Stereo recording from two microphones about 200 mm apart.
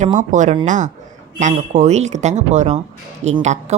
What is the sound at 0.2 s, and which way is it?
Speech, 40° right (ahead or behind).